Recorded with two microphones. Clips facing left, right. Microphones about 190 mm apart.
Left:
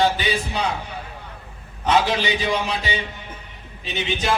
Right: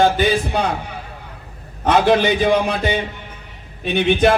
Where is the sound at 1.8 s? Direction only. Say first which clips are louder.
Right 6 dB; 55° right (ahead or behind).